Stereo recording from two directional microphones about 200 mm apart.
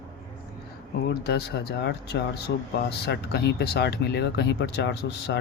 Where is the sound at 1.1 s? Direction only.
55° left (ahead or behind).